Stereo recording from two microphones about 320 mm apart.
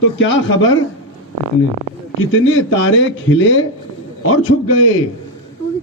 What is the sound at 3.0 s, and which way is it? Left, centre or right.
A man's voice, left.